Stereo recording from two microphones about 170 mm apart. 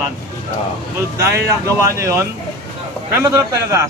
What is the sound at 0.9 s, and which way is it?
Speech, 15° right (ahead or behind).